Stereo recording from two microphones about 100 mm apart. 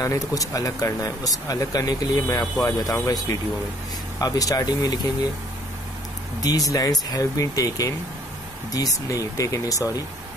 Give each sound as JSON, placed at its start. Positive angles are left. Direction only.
{"t": 0.0, "sound": "speech", "side_deg": 35}
{"t": 6.4, "sound": "speech", "side_deg": 40}